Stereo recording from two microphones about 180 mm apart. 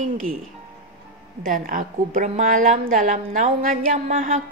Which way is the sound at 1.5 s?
50° right (ahead or behind).